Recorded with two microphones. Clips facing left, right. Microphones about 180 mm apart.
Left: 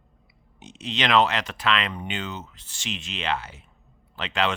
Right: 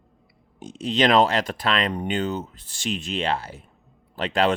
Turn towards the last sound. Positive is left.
turn(degrees=-35)  # may be behind; listen again after turning